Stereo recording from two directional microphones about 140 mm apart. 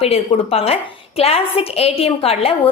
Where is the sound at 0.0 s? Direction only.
45° left (ahead or behind).